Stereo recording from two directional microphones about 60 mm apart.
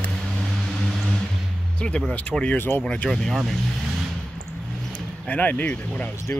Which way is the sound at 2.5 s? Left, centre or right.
Left.